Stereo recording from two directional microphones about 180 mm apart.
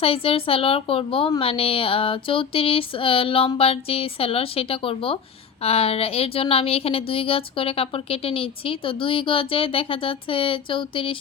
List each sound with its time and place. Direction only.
0.0 s speech: 30° left (ahead or behind)